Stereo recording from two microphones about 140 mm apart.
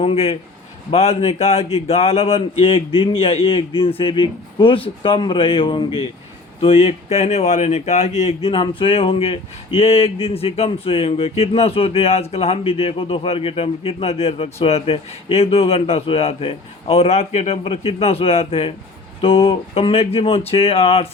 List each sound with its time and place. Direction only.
0.0 s speech: 45° left (ahead or behind)